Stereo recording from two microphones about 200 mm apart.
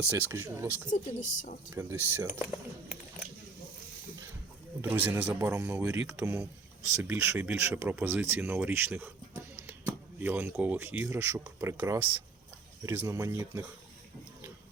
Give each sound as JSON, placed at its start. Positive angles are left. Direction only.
{"t": 0.1, "sound": "a man's voice", "side_deg": -15}
{"t": 0.9, "sound": "a woman's voice", "side_deg": 40}
{"t": 1.7, "sound": "a man's voice", "side_deg": -10}
{"t": 4.8, "sound": "a man's voice", "side_deg": -10}